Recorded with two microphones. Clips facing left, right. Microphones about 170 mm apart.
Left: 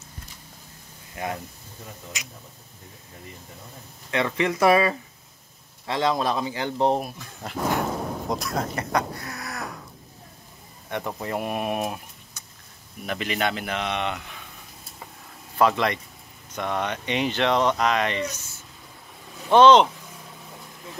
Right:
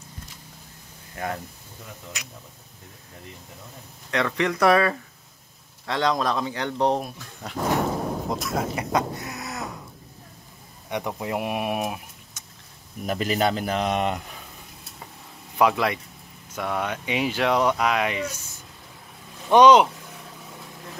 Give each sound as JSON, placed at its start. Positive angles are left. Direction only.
{"t": 1.1, "sound": "speech", "side_deg": 15}
{"t": 4.1, "sound": "speech", "side_deg": 5}
{"t": 8.9, "sound": "a sound", "side_deg": -20}
{"t": 10.9, "sound": "speech", "side_deg": -15}
{"t": 13.0, "sound": "speech", "side_deg": -40}
{"t": 15.6, "sound": "speech", "side_deg": -5}
{"t": 19.5, "sound": "speech", "side_deg": -10}